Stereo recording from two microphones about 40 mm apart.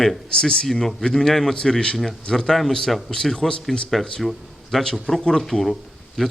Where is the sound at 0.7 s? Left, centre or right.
Centre.